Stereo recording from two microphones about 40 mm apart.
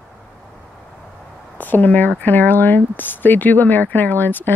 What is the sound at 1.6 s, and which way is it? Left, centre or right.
Speech, left.